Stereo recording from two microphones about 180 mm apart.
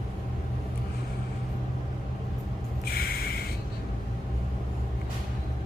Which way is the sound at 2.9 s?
55° left (ahead or behind).